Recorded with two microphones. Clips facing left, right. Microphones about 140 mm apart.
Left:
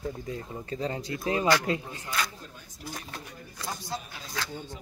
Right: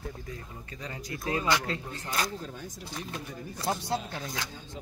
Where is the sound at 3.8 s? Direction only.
65° right (ahead or behind).